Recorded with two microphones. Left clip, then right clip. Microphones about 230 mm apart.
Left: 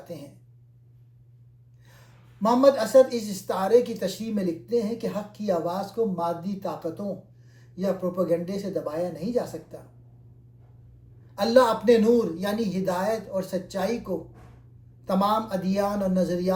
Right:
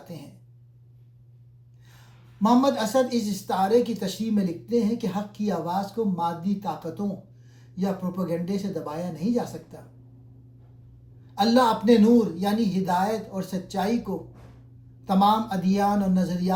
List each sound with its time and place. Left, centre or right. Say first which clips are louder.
2.5 s speech: left 3 dB; right
11.5 s speech: left 2 dB; right
15.1 s speech: right 3 dB; right